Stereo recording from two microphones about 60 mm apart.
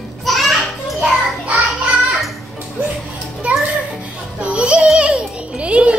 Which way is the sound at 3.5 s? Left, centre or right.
Right.